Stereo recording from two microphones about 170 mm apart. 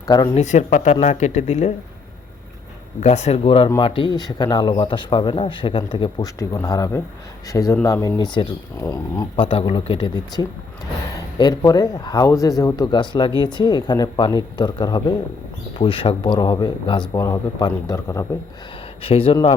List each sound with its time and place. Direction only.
0.3 s speech: 45° left (ahead or behind)
3.0 s speech: 40° left (ahead or behind); by 18.3 s 20° left (ahead or behind)
19.0 s speech: 35° left (ahead or behind)